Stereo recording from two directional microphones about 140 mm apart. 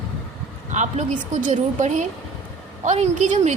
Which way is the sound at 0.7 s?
60° right (ahead or behind).